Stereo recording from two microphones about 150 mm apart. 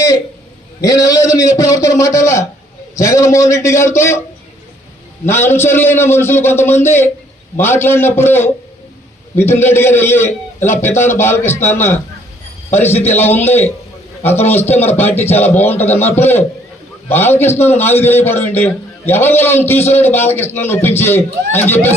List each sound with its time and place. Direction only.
0.8 s a man's voice: 25° left (ahead or behind)
5.3 s a man's voice: 15° left (ahead or behind)